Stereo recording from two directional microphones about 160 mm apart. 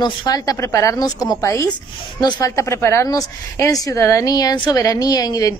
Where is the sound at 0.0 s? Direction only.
25° left (ahead or behind).